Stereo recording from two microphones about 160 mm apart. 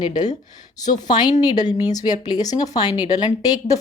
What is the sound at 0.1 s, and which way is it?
Speech, 50° left (ahead or behind).